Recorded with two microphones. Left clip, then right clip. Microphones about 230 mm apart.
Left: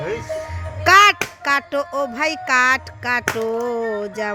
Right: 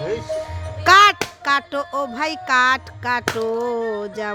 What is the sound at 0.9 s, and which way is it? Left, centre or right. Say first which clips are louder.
Speech: even; centre.